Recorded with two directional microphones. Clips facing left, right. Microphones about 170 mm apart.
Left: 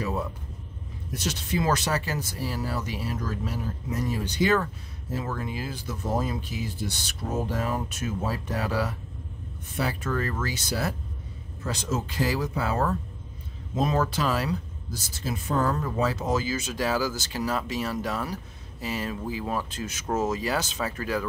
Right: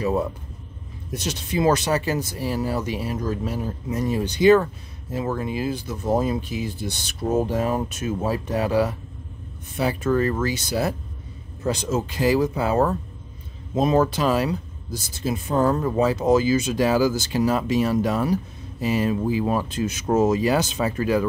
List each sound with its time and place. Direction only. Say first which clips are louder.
1.1 s speech: right 3 dB; 20° right (ahead or behind)